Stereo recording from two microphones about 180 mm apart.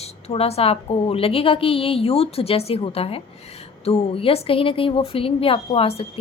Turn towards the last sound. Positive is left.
turn(degrees=35)  # may be behind; listen again after turning